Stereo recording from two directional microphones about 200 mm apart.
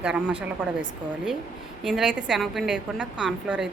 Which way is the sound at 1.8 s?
Centre (ahead or behind).